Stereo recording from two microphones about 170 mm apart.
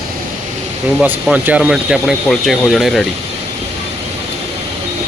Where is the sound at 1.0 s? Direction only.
10° right (ahead or behind).